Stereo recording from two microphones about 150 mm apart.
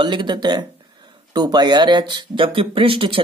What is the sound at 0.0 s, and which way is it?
Speech, 30° right (ahead or behind).